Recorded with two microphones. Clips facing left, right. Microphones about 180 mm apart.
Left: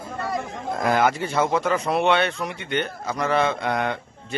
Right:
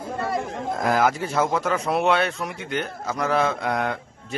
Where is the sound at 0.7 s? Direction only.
Centre (ahead or behind).